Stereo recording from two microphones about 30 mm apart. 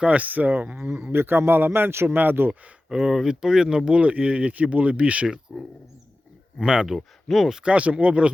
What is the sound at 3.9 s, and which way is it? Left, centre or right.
Speech, right.